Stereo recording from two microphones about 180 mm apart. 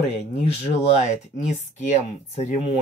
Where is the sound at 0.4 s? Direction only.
40° left (ahead or behind).